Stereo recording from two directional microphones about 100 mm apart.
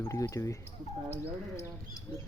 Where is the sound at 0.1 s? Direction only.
30° left (ahead or behind).